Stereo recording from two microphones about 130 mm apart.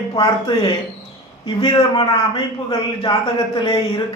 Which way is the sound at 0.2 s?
35° left (ahead or behind).